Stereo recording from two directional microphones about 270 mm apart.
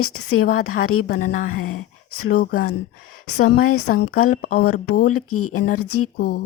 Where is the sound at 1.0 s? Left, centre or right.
Left.